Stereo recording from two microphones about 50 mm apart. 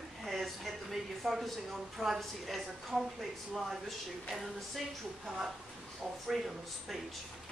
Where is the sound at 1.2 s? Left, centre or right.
Centre.